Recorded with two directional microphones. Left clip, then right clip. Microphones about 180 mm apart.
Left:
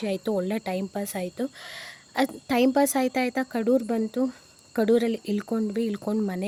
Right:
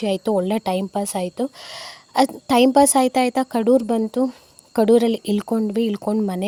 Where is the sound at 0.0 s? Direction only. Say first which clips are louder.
Right 7 dB; 25° right (ahead or behind).